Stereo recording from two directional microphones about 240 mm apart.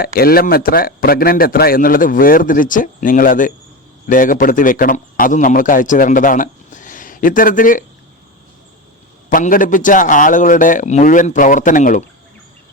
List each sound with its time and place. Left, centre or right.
0.0 s a man's voice: left
9.3 s a man's voice: left